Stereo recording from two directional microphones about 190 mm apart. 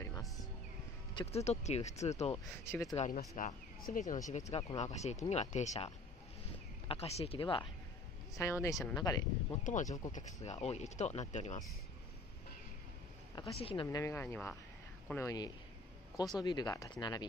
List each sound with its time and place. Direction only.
1.3 s speech: 35° left (ahead or behind)
2.3 s speech: 15° left (ahead or behind)
3.0 s speech: 40° left (ahead or behind)
6.9 s speech: 35° left (ahead or behind)
8.4 s speech: 15° left (ahead or behind)
9.6 s speech: 40° left (ahead or behind)
13.3 s speech: 20° left (ahead or behind)
13.8 s speech: 15° left (ahead or behind)